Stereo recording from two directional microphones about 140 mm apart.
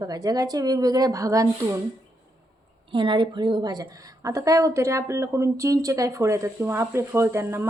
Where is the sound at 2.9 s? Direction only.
35° right (ahead or behind).